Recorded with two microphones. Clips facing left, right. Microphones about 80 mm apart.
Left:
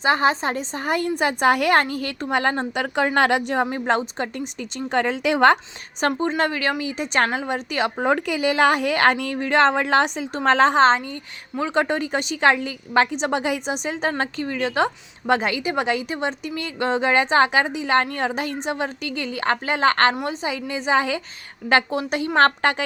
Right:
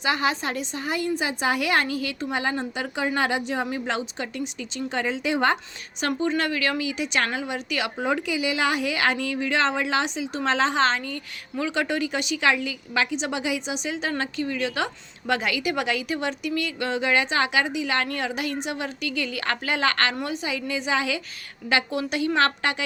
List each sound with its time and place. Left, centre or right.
0.0 s a woman's voice: left
3.7 s a woman's voice: left
4.9 s a woman's voice: left
6.0 s a woman's voice: left
21.9 s a woman's voice: left
22.4 s a woman's voice: left